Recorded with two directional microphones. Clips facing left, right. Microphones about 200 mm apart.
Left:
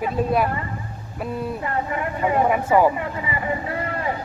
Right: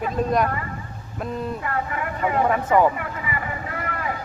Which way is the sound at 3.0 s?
25° left (ahead or behind).